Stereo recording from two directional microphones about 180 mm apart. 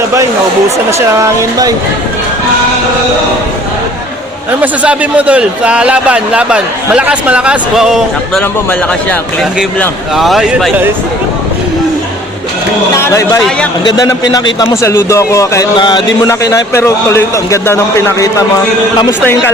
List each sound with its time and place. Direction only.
0.9 s a man's voice: 15° right (ahead or behind)
4.6 s a man's voice: 5° right (ahead or behind)
10.2 s speech: centre (ahead or behind)
13.0 s a man's voice: 15° left (ahead or behind)